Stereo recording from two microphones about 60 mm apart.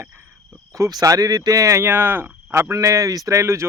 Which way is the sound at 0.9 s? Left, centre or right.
Right.